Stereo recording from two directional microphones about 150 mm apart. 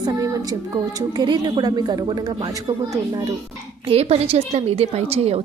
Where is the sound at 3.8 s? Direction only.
40° right (ahead or behind).